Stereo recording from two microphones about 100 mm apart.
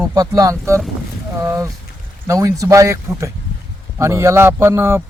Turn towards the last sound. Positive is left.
turn(degrees=-25)  # may be behind; listen again after turning